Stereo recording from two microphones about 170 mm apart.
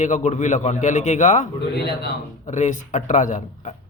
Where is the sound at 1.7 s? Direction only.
75° left (ahead or behind).